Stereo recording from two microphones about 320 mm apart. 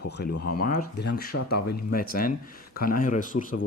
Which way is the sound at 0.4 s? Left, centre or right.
Left.